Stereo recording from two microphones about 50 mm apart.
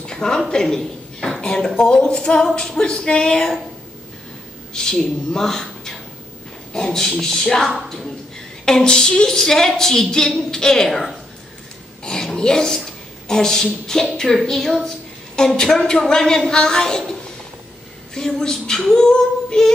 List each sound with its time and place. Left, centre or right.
0.0 s a woman's voice: centre
4.7 s a woman's voice: centre
6.7 s a sound: centre
7.1 s a woman's voice: centre
18.1 s a woman's voice: centre